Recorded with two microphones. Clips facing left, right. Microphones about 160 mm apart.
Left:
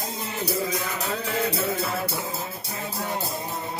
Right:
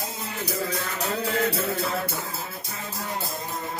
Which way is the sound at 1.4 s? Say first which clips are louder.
Left 2 dB; 5° left (ahead or behind).